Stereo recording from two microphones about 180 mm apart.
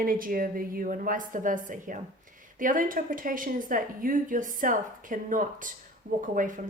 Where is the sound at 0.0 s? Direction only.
50° right (ahead or behind).